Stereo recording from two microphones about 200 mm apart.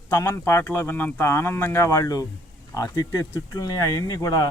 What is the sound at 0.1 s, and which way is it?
A man's voice, 10° left (ahead or behind).